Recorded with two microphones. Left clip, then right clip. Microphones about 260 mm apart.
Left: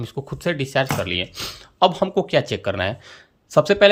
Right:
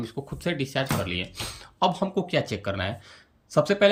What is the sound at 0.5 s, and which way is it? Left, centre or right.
Speech, centre.